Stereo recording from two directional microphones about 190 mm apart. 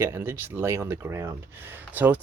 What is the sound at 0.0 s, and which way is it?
Speech, 15° right (ahead or behind).